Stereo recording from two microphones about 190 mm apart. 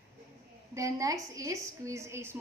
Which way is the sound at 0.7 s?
15° right (ahead or behind).